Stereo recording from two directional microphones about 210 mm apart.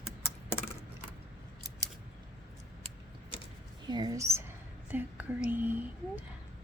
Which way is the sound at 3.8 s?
20° right (ahead or behind).